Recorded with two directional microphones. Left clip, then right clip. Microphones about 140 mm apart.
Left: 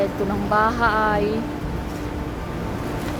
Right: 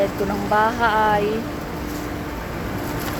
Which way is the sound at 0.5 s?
10° left (ahead or behind).